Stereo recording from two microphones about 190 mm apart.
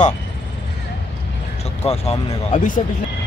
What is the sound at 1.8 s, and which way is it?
Speech, 35° left (ahead or behind).